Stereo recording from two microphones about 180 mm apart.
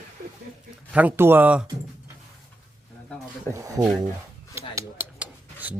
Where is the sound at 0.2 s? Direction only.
55° right (ahead or behind).